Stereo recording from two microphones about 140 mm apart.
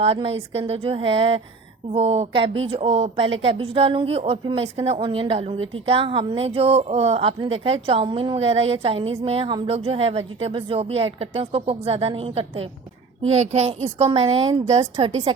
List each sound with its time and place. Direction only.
0.0 s a woman's voice: 45° right (ahead or behind)